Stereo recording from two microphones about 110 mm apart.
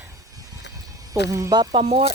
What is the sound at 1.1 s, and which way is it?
Speech, 30° right (ahead or behind).